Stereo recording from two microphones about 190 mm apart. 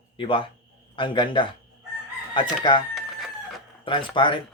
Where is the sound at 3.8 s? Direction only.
25° left (ahead or behind).